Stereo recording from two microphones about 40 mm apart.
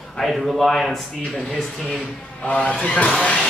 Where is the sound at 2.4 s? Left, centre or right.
Left.